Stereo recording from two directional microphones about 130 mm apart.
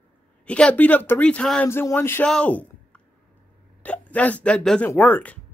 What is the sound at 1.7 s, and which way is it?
Speech, 20° left (ahead or behind).